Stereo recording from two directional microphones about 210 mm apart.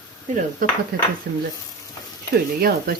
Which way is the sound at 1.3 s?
50° right (ahead or behind).